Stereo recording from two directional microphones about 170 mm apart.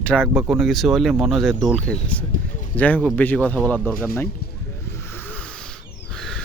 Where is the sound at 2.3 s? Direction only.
50° left (ahead or behind).